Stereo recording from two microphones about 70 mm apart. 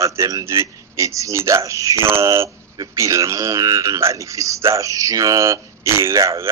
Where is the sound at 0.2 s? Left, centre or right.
Right.